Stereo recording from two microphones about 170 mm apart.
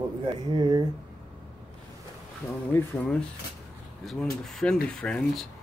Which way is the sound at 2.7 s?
10° left (ahead or behind).